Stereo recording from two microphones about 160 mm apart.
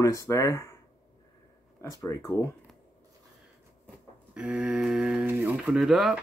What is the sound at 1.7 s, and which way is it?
Speech, 20° left (ahead or behind).